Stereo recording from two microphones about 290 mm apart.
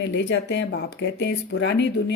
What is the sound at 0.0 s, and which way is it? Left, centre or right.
Speech, left.